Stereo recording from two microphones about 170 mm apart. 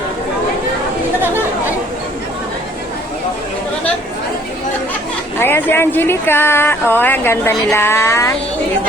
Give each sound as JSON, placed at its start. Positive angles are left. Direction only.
{"t": 5.4, "sound": "speech", "side_deg": 15}